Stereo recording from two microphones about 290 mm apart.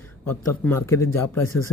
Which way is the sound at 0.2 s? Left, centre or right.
Left.